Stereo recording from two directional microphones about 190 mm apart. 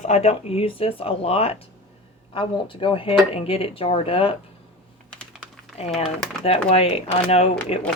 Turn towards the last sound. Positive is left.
turn(degrees=30)  # may be behind; listen again after turning